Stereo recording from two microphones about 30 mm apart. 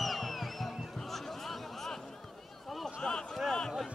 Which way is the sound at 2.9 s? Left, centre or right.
Left.